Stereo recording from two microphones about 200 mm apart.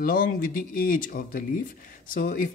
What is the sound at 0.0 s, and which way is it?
Speech, 45° left (ahead or behind).